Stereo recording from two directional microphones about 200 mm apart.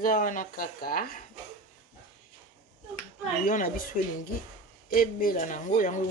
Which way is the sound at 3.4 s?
45° left (ahead or behind).